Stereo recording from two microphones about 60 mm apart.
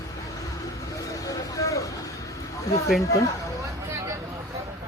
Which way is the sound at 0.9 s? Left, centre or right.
Left.